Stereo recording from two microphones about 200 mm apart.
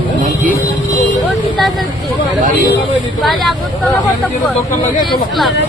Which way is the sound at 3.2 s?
Centre (ahead or behind).